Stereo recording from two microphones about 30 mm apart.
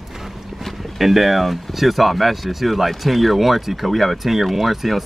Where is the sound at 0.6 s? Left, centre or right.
Centre.